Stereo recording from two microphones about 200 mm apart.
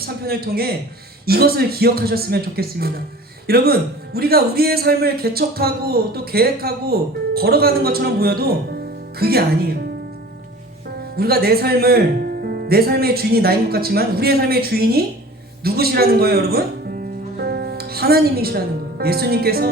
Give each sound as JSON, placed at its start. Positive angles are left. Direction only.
{"t": 0.0, "sound": "a man's voice", "side_deg": -50}
{"t": 11.2, "sound": "a man's voice", "side_deg": -50}